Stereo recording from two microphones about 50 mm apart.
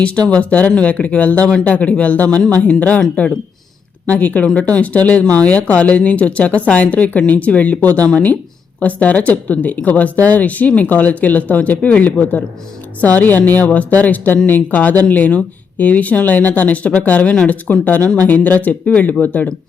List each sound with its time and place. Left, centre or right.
0.0 s a woman's voice: left
4.0 s a woman's voice: left